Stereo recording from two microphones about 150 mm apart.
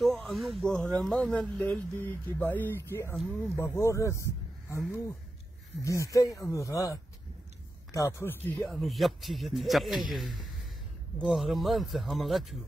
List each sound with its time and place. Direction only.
0.0 s speech: centre (ahead or behind)
3.2 s speech: centre (ahead or behind)
3.5 s speech: 20° left (ahead or behind)
5.9 s speech: 20° left (ahead or behind)
8.6 s speech: centre (ahead or behind)